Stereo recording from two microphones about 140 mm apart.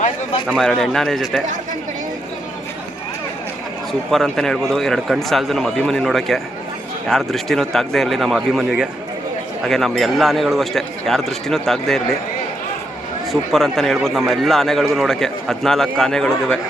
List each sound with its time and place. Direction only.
0.5 s speech: 5° left (ahead or behind)
4.1 s speech: 5° left (ahead or behind)
13.3 s speech: centre (ahead or behind)